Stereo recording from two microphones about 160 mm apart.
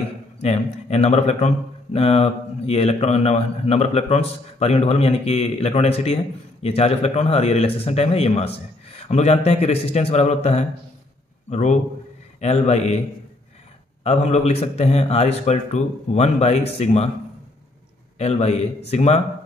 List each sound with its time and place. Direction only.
0.4 s a man's voice: 45° left (ahead or behind)
14.0 s a man's voice: 45° left (ahead or behind)
18.1 s a man's voice: 40° left (ahead or behind)